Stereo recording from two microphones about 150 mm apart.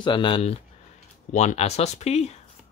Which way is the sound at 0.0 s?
30° left (ahead or behind).